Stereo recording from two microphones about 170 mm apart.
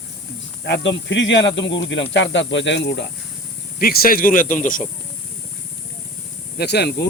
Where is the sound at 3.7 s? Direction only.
60° left (ahead or behind).